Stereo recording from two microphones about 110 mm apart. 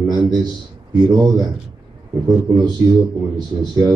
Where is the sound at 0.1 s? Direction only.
40° right (ahead or behind).